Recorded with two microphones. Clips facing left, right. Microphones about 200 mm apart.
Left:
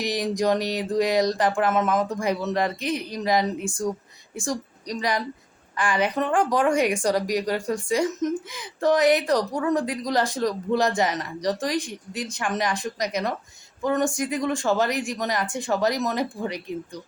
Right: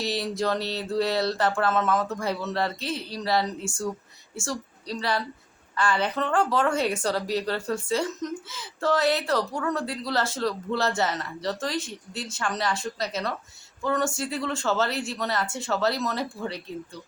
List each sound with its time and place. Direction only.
0.0 s a woman's voice: 15° left (ahead or behind)